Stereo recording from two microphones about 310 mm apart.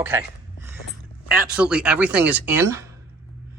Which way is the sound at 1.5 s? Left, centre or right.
Centre.